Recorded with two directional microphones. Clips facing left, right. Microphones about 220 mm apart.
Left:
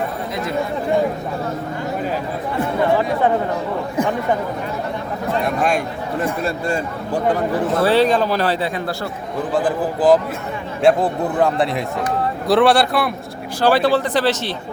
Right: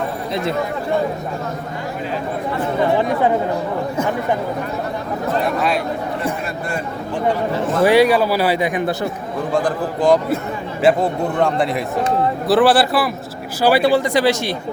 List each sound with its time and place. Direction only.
5.5 s a man's voice: 50° left (ahead or behind)
7.8 s speech: 15° right (ahead or behind)
9.5 s a man's voice: 5° left (ahead or behind); by 14.5 s 10° right (ahead or behind)